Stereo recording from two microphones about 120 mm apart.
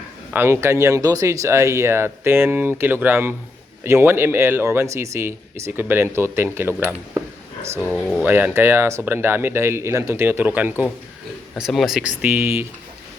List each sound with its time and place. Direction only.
0.3 s speech: 20° right (ahead or behind)
7.8 s speech: 15° left (ahead or behind)
8.2 s speech: 15° right (ahead or behind)
11.5 s a man's voice: centre (ahead or behind)
12.2 s speech: 15° right (ahead or behind)